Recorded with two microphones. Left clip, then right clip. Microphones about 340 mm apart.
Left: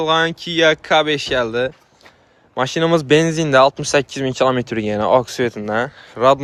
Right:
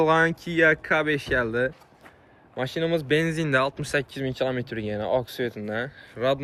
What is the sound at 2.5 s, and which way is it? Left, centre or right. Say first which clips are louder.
Speech: left 10 dB; left.